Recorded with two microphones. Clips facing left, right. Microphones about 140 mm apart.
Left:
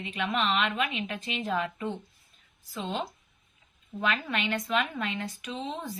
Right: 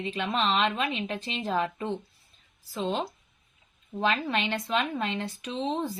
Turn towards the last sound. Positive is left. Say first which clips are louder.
# right 5 dB
turn(degrees=-30)  # may be behind; listen again after turning